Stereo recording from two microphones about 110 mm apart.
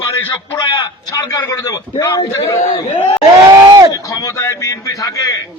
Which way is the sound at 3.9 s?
35° left (ahead or behind).